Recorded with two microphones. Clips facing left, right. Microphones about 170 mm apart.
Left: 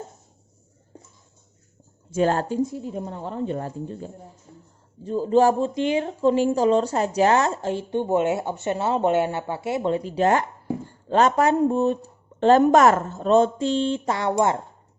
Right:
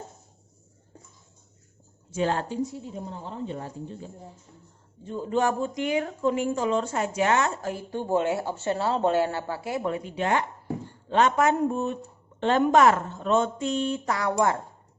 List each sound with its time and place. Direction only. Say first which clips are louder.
2.1 s a woman's voice: left 5 dB; 45° left (ahead or behind)
5.0 s speech: left 7 dB; 35° left (ahead or behind)